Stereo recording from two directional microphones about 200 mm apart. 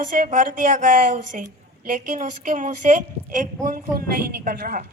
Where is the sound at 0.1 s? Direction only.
40° right (ahead or behind).